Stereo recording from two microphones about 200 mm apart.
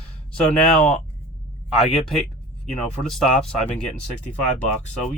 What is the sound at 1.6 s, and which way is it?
Speech, centre (ahead or behind).